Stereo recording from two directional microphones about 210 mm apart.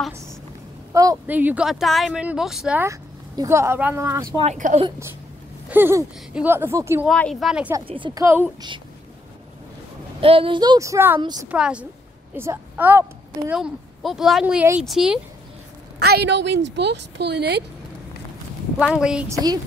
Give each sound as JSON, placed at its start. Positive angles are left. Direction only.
{"t": 0.9, "sound": "speech", "side_deg": -15}
{"t": 4.4, "sound": "speech", "side_deg": -35}
{"t": 4.8, "sound": "speech", "side_deg": -15}
{"t": 7.1, "sound": "speech", "side_deg": 0}
{"t": 7.8, "sound": "speech", "side_deg": -25}
{"t": 10.2, "sound": "speech", "side_deg": -25}
{"t": 11.4, "sound": "speech", "side_deg": -5}
{"t": 16.0, "sound": "speech", "side_deg": -50}
{"t": 18.9, "sound": "speech", "side_deg": -5}